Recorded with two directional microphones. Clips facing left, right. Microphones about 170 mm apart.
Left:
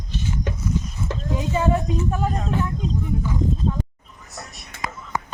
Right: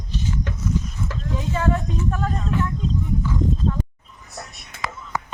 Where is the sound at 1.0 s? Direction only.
20° left (ahead or behind).